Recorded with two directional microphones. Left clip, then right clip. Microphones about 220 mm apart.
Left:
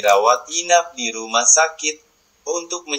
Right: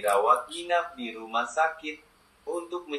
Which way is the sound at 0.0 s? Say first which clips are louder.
Left 8 dB; 55° left (ahead or behind).